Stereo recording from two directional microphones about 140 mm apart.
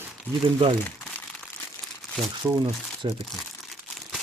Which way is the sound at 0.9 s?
15° left (ahead or behind).